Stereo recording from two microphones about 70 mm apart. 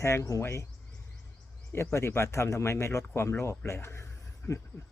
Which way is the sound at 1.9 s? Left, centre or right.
Left.